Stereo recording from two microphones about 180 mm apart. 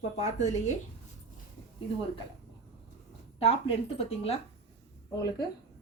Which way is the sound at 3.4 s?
35° left (ahead or behind).